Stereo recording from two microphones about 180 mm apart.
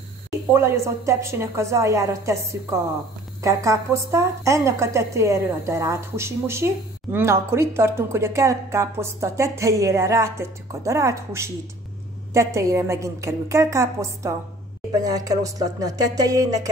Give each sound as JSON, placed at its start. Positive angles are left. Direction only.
{"t": 0.5, "sound": "a woman's voice", "side_deg": -15}
{"t": 3.4, "sound": "a woman's voice", "side_deg": -15}